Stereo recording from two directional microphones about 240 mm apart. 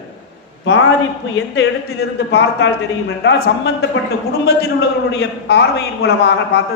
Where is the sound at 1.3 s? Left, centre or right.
Left.